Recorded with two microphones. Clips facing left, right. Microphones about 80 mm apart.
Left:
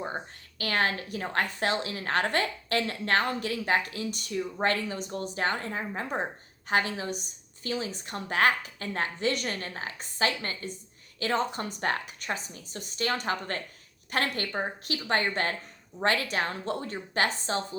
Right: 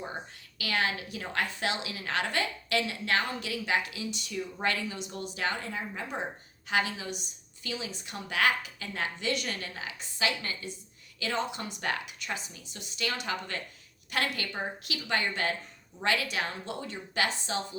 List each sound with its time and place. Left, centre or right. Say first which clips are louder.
0.6 s a woman's voice: left 3 dB; left